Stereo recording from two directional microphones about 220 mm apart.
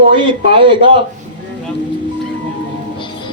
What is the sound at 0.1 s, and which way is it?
Speech, 20° right (ahead or behind).